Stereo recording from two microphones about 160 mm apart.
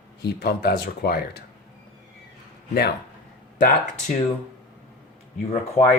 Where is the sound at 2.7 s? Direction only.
80° left.